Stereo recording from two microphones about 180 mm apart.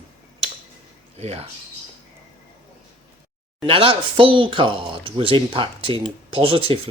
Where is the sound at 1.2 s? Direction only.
35° right (ahead or behind).